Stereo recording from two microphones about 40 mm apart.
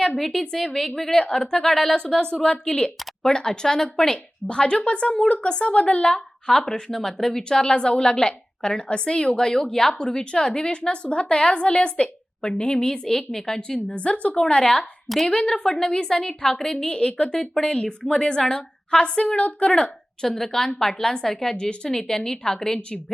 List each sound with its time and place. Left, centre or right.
0.2 s a woman's voice: centre
1.2 s a woman's voice: left
1.6 s a woman's voice: centre; by 6.1 s left
6.1 s a woman's voice: centre
13.6 s a woman's voice: left
16.8 s a woman's voice: left
17.3 s a woman's voice: centre
20.2 s a woman's voice: centre